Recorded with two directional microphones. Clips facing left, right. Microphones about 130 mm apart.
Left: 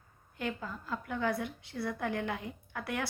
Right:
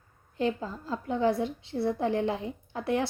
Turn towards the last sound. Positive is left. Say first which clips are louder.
# right 8 dB
turn(degrees=-25)  # may be behind; listen again after turning